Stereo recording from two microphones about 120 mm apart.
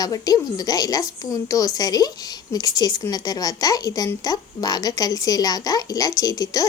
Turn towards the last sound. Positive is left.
turn(degrees=30)  # may be behind; listen again after turning